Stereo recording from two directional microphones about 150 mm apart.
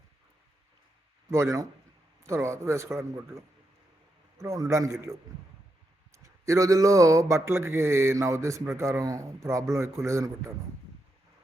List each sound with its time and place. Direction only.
1.3 s speech: 20° right (ahead or behind)